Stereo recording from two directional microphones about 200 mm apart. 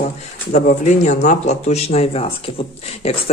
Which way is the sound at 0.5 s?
35° left (ahead or behind).